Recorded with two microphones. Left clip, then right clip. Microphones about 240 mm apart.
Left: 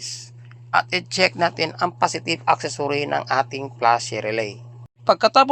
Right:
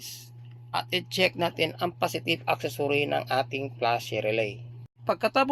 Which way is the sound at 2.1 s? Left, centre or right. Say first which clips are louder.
Left 7 dB; left.